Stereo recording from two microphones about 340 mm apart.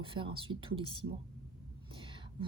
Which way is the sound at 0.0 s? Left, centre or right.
Centre.